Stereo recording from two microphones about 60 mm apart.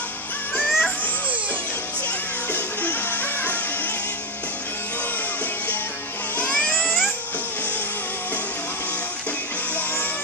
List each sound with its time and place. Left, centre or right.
0.7 s music: centre
2.5 s music: left
6.3 s a sound: left